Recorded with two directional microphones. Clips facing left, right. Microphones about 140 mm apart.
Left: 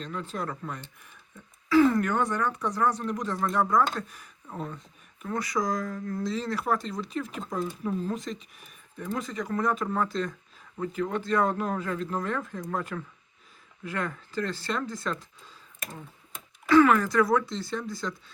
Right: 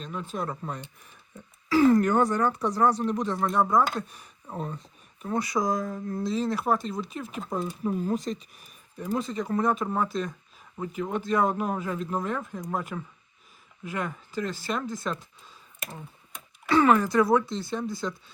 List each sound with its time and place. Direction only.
0.0 s speech: 15° right (ahead or behind)
1.7 s speech: 40° right (ahead or behind); by 3.8 s 20° right (ahead or behind)
4.5 s speech: 30° right (ahead or behind)
8.0 s speech: 40° right (ahead or behind)
9.1 s speech: 25° right (ahead or behind)
16.6 s speech: 25° right (ahead or behind)